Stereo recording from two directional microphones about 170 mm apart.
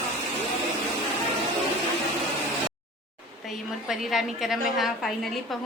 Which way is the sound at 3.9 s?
Centre (ahead or behind).